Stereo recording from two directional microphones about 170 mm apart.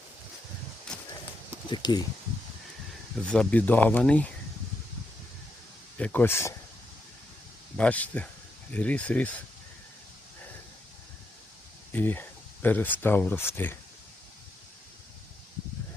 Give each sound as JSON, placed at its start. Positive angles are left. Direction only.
{"t": 0.9, "sound": "horse", "side_deg": 5}
{"t": 1.7, "sound": "speech", "side_deg": 25}
{"t": 3.2, "sound": "speech", "side_deg": 10}
{"t": 6.0, "sound": "speech", "side_deg": 10}
{"t": 7.8, "sound": "speech", "side_deg": 10}
{"t": 11.9, "sound": "speech", "side_deg": 10}